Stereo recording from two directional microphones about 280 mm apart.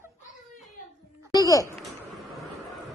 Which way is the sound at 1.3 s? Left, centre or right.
Centre.